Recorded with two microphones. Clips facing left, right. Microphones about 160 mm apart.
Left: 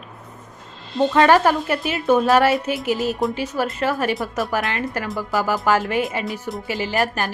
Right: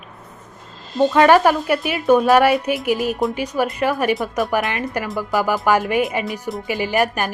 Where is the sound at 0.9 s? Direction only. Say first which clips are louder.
Right 2 dB; 15° right (ahead or behind).